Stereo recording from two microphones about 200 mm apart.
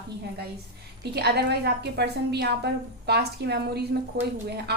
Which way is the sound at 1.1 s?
55° right (ahead or behind).